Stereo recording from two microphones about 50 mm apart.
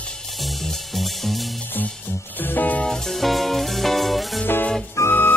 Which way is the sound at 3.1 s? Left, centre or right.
Centre.